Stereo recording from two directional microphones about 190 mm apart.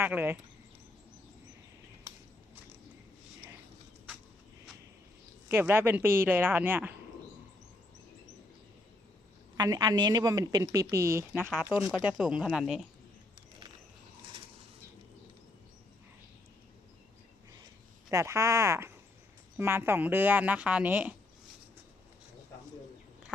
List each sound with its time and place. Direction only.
0.0 s speech: 10° right (ahead or behind)
5.5 s speech: 10° right (ahead or behind)
9.6 s a woman's voice: 20° right (ahead or behind)
11.7 s speech: 5° right (ahead or behind)
18.1 s speech: 15° right (ahead or behind)